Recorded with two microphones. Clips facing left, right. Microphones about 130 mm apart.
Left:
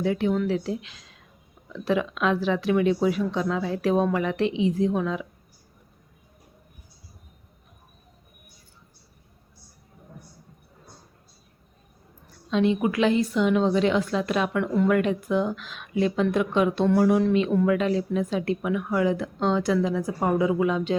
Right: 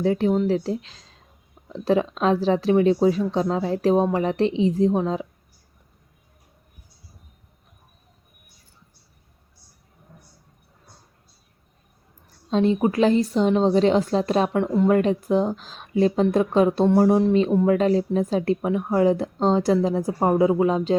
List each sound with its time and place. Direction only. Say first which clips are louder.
0.0 s speech: right 3 dB; 35° right (ahead or behind)
12.5 s speech: right 2 dB; 35° right (ahead or behind)
17.7 s speech: right 4 dB; 35° right (ahead or behind)